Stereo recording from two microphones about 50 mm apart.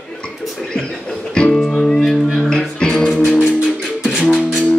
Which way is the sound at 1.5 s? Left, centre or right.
Centre.